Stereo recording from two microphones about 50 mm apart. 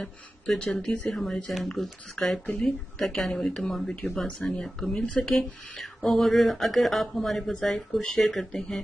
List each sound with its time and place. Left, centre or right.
0.0 s a woman's voice: centre
1.1 s a woman's voice: centre
4.9 s speech: left
5.3 s a woman's voice: centre